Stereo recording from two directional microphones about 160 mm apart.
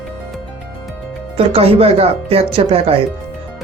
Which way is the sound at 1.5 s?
35° right (ahead or behind).